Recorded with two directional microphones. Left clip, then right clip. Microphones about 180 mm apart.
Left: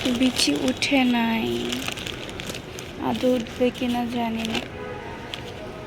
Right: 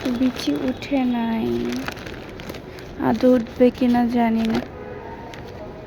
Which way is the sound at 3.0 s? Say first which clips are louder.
Right 5 dB; 40° right (ahead or behind).